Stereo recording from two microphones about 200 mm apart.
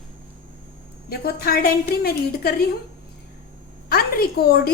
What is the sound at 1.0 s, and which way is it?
A woman's voice, 50° left (ahead or behind).